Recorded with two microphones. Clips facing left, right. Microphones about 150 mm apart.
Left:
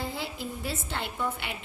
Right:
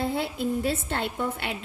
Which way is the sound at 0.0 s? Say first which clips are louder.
Right 7 dB; 60° right (ahead or behind).